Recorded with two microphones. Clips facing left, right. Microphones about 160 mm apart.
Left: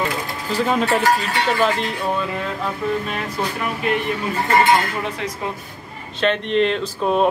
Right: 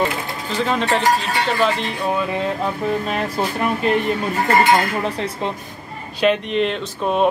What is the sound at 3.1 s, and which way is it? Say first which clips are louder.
Speech: right 3 dB; 35° right (ahead or behind).